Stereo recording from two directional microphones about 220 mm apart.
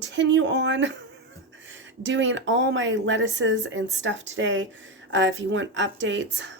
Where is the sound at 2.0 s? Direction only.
60° right (ahead or behind).